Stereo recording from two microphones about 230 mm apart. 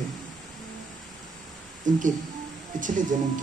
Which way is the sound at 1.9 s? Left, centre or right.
Right.